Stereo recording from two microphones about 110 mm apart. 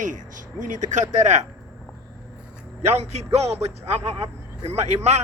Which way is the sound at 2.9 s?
80° right.